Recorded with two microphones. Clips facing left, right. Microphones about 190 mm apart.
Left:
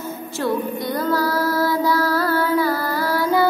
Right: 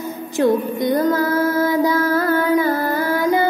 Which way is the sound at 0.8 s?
20° right (ahead or behind).